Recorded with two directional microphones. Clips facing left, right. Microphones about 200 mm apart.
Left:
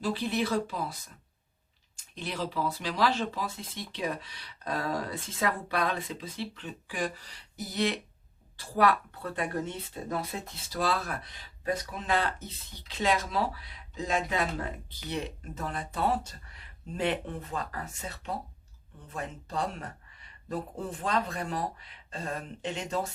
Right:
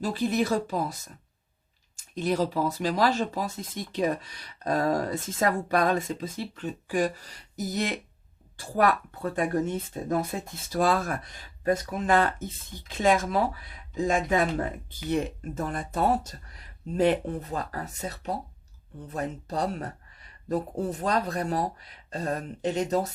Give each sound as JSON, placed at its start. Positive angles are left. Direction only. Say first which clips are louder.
{"t": 0.0, "sound": "speech", "louder": "right 4 dB", "side_deg": -45}